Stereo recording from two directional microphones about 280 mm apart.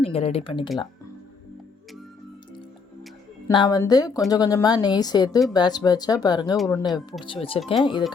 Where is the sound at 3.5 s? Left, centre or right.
Centre.